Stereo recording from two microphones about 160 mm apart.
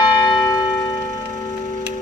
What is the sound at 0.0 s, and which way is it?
Church bell, 25° left (ahead or behind).